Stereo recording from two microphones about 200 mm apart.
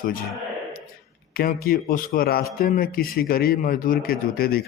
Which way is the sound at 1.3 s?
50° left (ahead or behind).